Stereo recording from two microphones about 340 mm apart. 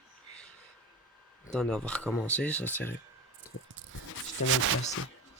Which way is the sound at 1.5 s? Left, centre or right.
Centre.